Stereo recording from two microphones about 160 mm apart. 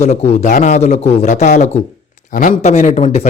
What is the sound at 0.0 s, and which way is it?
Speech, 40° left (ahead or behind).